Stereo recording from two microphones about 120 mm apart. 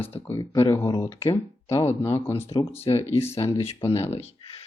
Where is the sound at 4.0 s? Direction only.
60° left (ahead or behind).